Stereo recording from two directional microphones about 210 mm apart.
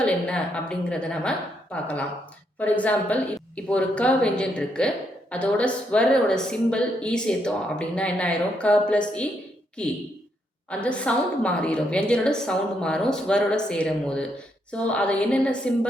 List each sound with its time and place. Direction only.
0.0 s a woman's voice: 5° left (ahead or behind)
10.7 s a woman's voice: 5° left (ahead or behind)